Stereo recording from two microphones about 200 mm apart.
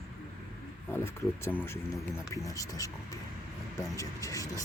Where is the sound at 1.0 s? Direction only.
10° left (ahead or behind).